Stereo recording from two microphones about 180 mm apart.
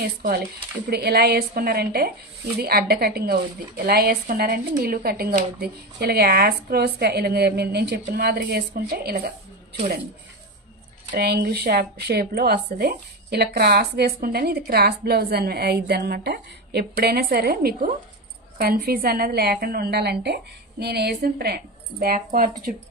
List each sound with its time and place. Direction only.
0.0 s speech: 50° right (ahead or behind)
0.8 s speech: 60° right (ahead or behind)
11.1 s speech: 60° right (ahead or behind)